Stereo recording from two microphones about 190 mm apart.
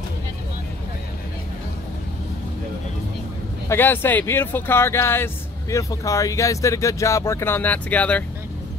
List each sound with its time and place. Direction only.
3.6 s speech: 10° left (ahead or behind)